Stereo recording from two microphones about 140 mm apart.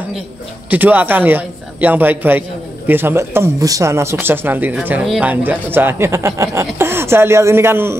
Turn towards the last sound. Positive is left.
turn(degrees=-15)  # may be behind; listen again after turning